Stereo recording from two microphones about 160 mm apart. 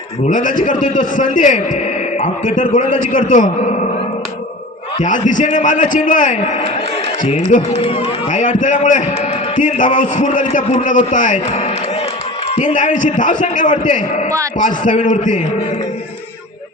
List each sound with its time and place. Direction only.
0.3 s a man's voice: 55° left (ahead or behind)
4.9 s a man's voice: 55° left (ahead or behind)
7.9 s speech: 35° left (ahead or behind)
8.3 s a man's voice: 50° left (ahead or behind)